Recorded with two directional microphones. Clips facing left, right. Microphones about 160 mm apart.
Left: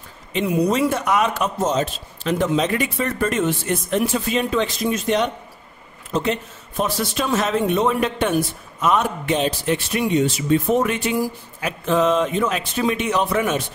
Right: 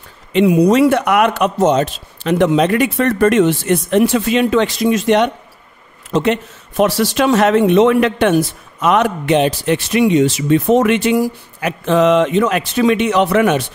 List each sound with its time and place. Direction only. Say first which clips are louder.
0.3 s a man's voice: right 8 dB; 75° right (ahead or behind)